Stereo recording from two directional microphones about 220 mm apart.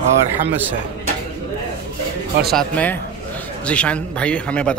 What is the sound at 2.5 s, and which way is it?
Speech, 5° left (ahead or behind).